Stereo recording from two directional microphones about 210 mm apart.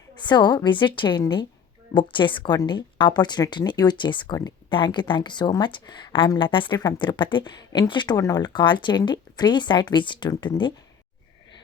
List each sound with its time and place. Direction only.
0.2 s speech: 20° left (ahead or behind)